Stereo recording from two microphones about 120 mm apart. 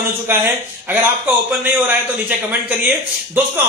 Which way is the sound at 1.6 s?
15° right (ahead or behind).